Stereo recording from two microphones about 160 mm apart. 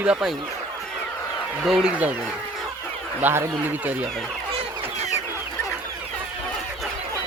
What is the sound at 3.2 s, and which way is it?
Speech, 15° right (ahead or behind).